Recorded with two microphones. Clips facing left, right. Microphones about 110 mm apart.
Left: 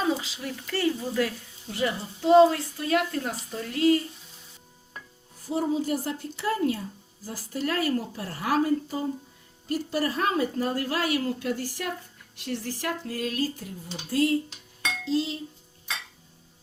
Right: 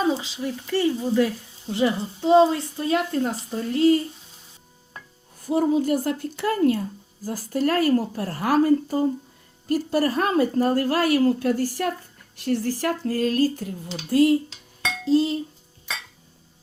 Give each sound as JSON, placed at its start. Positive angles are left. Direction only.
{"t": 0.1, "sound": "speech", "side_deg": -20}
{"t": 5.5, "sound": "a woman's voice", "side_deg": -60}
{"t": 13.8, "sound": "speech", "side_deg": -75}
{"t": 15.0, "sound": "speech", "side_deg": -45}